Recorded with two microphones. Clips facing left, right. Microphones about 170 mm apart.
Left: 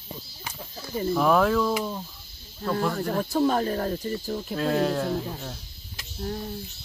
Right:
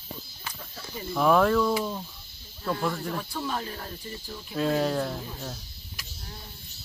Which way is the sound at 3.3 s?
45° left (ahead or behind).